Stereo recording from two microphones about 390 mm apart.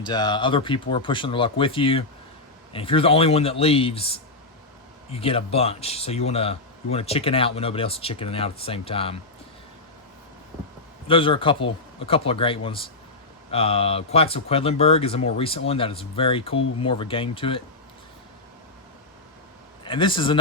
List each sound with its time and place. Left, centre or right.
0.0 s speech: centre
11.1 s speech: centre
19.8 s a man's voice: centre